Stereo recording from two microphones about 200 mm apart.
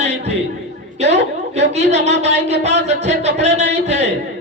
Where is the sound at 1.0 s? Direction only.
60° right (ahead or behind).